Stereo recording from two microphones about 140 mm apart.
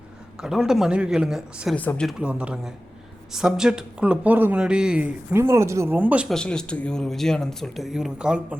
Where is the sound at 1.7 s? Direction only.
10° left (ahead or behind).